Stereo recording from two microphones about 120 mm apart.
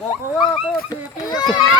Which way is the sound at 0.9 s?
35° left (ahead or behind).